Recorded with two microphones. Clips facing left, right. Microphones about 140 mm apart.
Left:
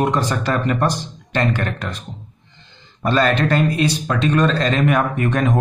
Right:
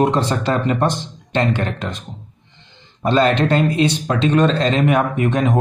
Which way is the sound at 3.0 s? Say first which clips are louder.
Right 2 dB; 20° right (ahead or behind).